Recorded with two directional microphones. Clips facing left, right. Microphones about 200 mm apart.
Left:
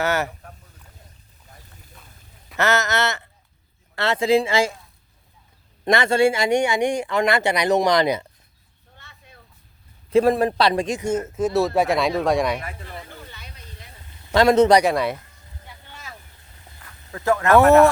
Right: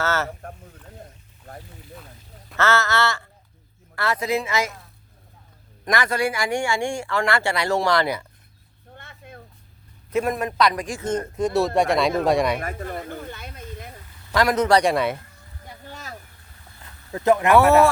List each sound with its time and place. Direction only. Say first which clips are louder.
0.0 s speech: left 2 dB; 15° left (ahead or behind)
2.6 s speech: even; 20° left (ahead or behind)
5.8 s speech: left 6 dB; 25° left (ahead or behind)
9.0 s a sound: right 8 dB; 55° right (ahead or behind)
10.1 s speech: left 7 dB; 30° left (ahead or behind)
11.0 s speech: left 1 dB; 5° left (ahead or behind)
12.5 s a sound: right 5 dB; 45° right (ahead or behind)
14.3 s speech: left 6 dB; 25° left (ahead or behind)
14.8 s speech: even; centre (ahead or behind)
15.6 s a sound: right 5 dB; 40° right (ahead or behind)
16.8 s speech: right 3 dB; 20° right (ahead or behind)